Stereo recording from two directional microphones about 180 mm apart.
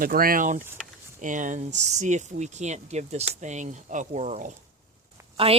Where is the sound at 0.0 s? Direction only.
50° right (ahead or behind).